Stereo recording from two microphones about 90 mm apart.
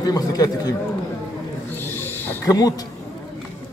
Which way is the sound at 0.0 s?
45° left (ahead or behind).